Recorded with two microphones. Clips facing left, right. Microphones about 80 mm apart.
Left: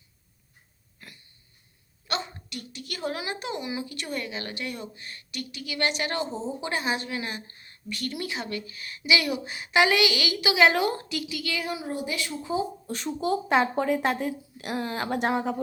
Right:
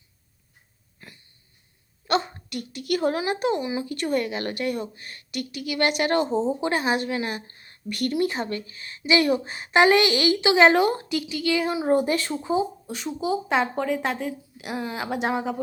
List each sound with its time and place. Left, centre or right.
1.0 s wheeze: right
2.0 s a sound: right
3.2 s a woman's voice: right
3.6 s a woman's voice: right
3.8 s a woman's voice: right
7.9 s a woman's voice: right
8.1 s a woman's voice: right
11.9 s a woman's voice: right
12.4 s speech: right
12.9 s speech: centre